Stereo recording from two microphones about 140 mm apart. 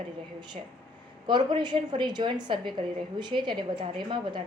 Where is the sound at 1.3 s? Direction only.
35° right (ahead or behind).